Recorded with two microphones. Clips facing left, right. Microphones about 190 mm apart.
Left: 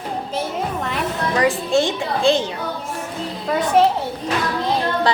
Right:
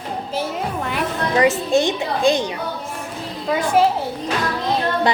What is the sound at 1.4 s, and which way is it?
A woman's voice, 20° right (ahead or behind).